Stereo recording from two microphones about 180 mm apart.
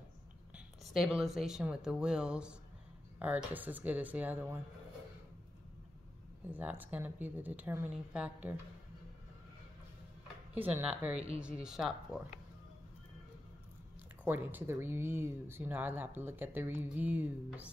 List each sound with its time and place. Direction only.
0.6 s speech: centre (ahead or behind)
6.5 s speech: 10° right (ahead or behind)
10.5 s speech: 10° right (ahead or behind)
14.2 s speech: 10° right (ahead or behind)